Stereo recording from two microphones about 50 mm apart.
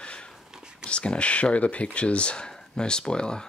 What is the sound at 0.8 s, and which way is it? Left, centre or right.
Speech, left.